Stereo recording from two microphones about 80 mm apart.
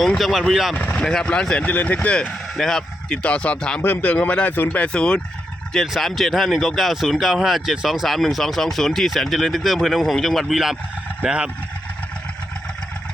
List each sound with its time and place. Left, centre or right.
0.2 s speech: centre
0.7 s speech: centre
2.6 s speech: centre
3.2 s speech: centre
3.8 s speech: left; by 11.5 s centre